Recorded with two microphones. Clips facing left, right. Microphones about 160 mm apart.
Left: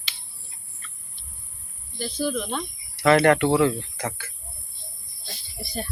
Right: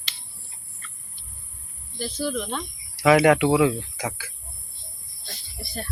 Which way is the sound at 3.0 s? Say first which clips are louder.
Right 1 dB; 10° right (ahead or behind).